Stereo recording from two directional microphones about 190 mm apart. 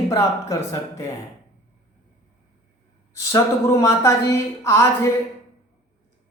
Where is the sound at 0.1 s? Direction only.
15° left (ahead or behind).